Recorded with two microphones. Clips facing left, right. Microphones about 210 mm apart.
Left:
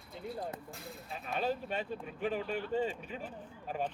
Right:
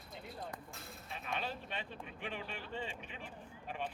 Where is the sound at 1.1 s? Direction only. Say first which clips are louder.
Left 7 dB; 40° left (ahead or behind).